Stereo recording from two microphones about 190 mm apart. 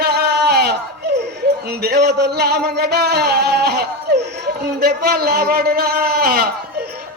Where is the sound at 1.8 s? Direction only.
60° right (ahead or behind).